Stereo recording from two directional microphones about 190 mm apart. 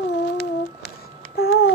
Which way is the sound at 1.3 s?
55° left (ahead or behind).